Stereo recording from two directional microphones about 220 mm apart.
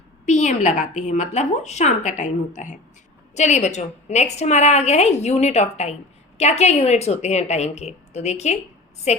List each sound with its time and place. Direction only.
0.3 s a woman's voice: 35° left (ahead or behind)